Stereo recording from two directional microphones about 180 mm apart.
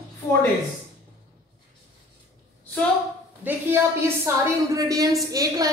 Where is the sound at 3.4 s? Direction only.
15° right (ahead or behind).